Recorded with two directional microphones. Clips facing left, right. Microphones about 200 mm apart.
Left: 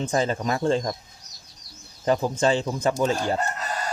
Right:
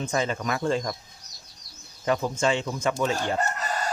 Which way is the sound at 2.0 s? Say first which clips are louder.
Left 3 dB; 35° left (ahead or behind).